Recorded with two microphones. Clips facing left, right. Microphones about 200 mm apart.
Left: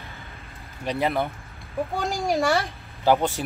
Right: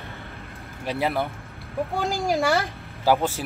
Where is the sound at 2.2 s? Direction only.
Centre (ahead or behind).